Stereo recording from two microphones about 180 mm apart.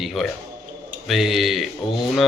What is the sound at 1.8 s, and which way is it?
Speech, 25° left (ahead or behind).